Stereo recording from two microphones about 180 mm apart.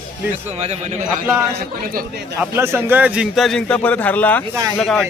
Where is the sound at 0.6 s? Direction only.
40° right (ahead or behind).